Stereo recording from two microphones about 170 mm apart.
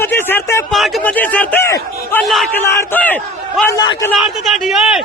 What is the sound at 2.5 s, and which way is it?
A man's voice, 10° left (ahead or behind).